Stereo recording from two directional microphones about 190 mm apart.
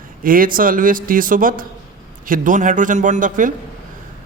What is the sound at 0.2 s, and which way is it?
A man's voice, 45° right (ahead or behind).